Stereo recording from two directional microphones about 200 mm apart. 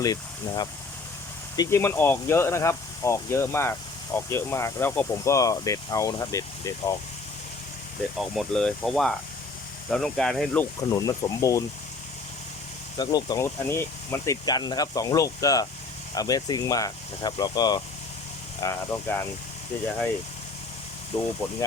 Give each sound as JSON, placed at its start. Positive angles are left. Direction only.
{"t": 0.0, "sound": "speech", "side_deg": 20}
{"t": 8.4, "sound": "speech", "side_deg": 0}
{"t": 10.8, "sound": "speech", "side_deg": 15}
{"t": 13.0, "sound": "speech", "side_deg": 20}